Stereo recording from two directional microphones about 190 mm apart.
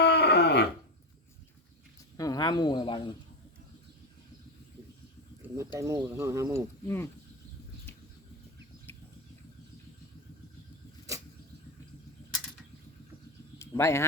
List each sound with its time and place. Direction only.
0.0 s a sound: 60° left (ahead or behind)
2.1 s speech: 20° left (ahead or behind)
5.5 s speech: 15° right (ahead or behind)
6.8 s speech: 15° left (ahead or behind)
8.9 s a sound: 10° left (ahead or behind)
13.6 s speech: 15° left (ahead or behind)